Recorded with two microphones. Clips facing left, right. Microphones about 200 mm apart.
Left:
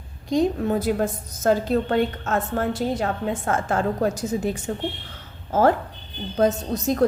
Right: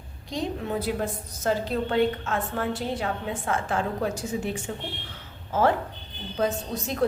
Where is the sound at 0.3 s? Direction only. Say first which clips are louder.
Left 8 dB; 45° left (ahead or behind).